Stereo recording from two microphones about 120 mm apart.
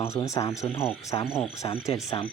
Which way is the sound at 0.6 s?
50° left (ahead or behind).